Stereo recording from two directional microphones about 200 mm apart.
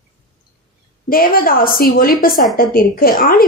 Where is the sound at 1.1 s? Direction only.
45° left (ahead or behind).